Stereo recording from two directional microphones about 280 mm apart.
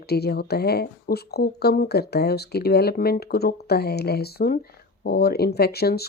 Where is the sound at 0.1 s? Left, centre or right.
Left.